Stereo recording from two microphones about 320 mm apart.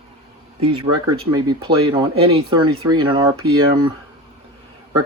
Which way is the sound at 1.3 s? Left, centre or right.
Centre.